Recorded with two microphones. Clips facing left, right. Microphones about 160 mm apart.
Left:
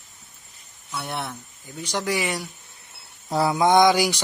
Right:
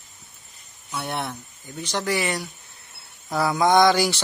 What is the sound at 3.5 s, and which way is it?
Speech, 20° left (ahead or behind).